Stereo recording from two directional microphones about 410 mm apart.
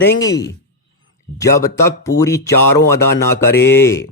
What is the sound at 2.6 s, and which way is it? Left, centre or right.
Speech, left.